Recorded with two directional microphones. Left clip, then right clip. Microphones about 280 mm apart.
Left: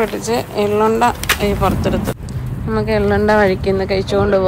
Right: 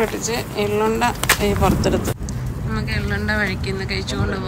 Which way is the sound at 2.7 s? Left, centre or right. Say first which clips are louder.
Left 10 dB; centre.